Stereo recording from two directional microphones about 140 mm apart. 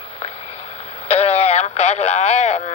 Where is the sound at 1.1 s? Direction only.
50° left (ahead or behind).